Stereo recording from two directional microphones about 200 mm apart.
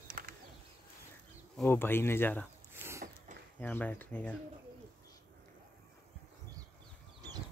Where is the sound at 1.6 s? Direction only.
10° left (ahead or behind).